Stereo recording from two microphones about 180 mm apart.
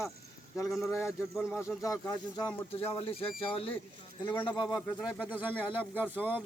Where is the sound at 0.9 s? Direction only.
15° left (ahead or behind).